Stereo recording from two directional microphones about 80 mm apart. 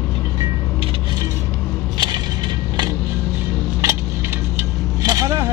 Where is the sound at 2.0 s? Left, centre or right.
Right.